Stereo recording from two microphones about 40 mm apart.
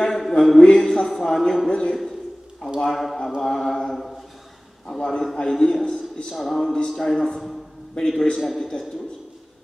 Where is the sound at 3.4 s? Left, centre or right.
Centre.